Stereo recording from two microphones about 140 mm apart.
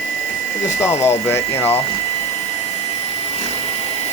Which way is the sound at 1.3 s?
15° left (ahead or behind).